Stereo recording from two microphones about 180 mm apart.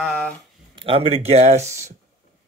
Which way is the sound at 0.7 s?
30° right (ahead or behind).